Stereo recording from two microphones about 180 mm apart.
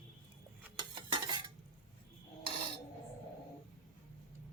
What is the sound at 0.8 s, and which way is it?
Stir, 25° right (ahead or behind).